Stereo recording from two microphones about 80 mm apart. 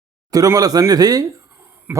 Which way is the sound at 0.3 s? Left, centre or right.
Right.